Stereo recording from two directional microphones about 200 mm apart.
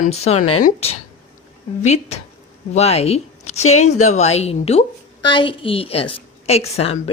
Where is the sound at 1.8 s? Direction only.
35° left (ahead or behind).